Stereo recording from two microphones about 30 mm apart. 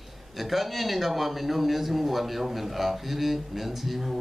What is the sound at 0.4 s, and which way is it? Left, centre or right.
A man's voice, centre.